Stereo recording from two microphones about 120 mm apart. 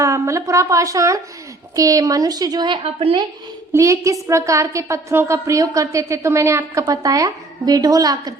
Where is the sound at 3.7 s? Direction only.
25° right (ahead or behind).